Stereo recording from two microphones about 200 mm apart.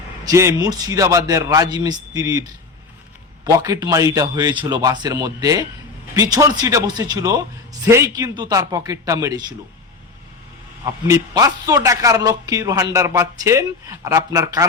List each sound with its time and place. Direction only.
0.3 s a man's voice: 15° right (ahead or behind)
3.4 s a man's voice: 20° right (ahead or behind)
11.1 s a man's voice: 15° right (ahead or behind)